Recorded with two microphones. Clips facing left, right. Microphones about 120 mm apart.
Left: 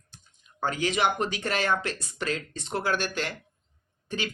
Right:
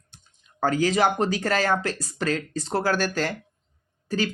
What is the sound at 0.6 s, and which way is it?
Speech, 40° right (ahead or behind).